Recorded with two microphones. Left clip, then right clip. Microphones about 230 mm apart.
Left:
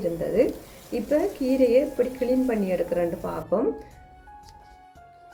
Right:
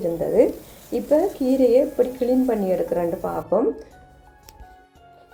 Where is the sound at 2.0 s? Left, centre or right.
Centre.